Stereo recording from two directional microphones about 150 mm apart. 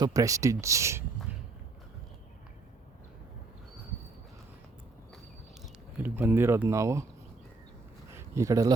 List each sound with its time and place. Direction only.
0.0 s speech: 25° right (ahead or behind)
6.0 s speech: 15° right (ahead or behind)
8.1 s a sound: 20° right (ahead or behind)